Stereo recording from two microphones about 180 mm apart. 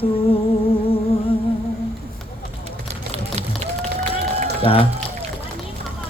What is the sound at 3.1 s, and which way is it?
Run, 35° right (ahead or behind).